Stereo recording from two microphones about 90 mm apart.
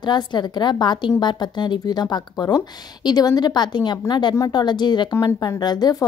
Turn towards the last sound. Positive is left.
turn(degrees=50)  # may be behind; listen again after turning